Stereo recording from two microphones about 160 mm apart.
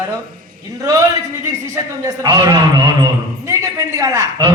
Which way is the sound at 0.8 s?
20° right (ahead or behind).